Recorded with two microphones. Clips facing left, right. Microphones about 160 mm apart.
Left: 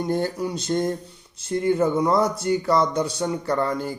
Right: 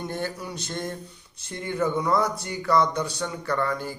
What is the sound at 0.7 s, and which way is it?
Speech, 35° left (ahead or behind).